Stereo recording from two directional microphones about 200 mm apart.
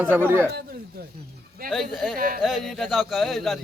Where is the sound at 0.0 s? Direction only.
10° right (ahead or behind).